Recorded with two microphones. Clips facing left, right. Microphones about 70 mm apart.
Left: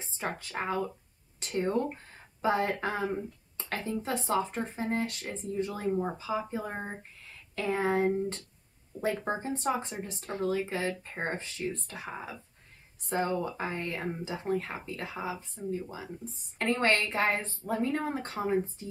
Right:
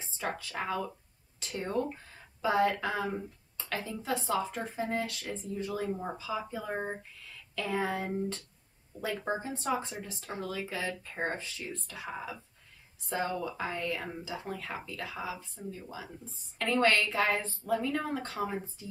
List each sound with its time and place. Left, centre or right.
0.0 s speech: left
9.6 s speech: left